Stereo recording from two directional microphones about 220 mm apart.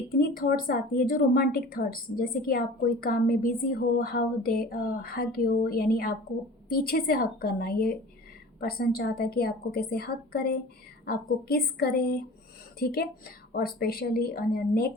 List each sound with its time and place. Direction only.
0.2 s a woman's voice: 40° left (ahead or behind)